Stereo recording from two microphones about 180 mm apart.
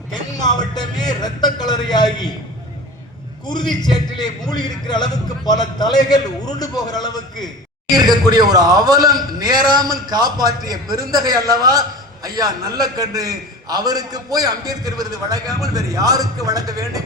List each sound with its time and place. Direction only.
0.3 s a man's voice: 25° left (ahead or behind)
3.4 s a man's voice: 25° left (ahead or behind)
7.9 s a man's voice: 20° right (ahead or behind)